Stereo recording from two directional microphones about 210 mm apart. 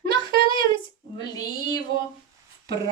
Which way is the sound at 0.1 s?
25° left (ahead or behind).